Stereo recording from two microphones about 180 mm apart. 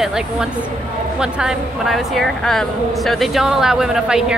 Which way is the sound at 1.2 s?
5° right (ahead or behind).